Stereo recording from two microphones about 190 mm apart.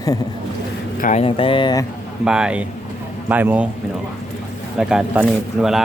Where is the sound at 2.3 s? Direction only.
5° right (ahead or behind).